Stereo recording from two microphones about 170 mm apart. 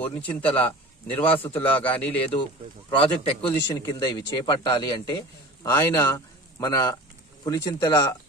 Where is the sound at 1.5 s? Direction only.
25° left (ahead or behind).